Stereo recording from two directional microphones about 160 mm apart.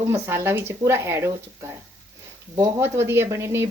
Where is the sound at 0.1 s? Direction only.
15° right (ahead or behind).